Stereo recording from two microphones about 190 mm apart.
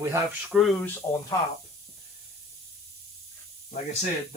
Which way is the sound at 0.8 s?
10° left (ahead or behind).